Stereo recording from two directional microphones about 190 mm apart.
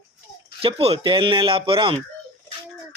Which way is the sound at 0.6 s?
30° right (ahead or behind).